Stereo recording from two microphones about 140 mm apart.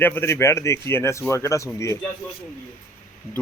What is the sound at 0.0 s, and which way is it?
Speech, 15° left (ahead or behind).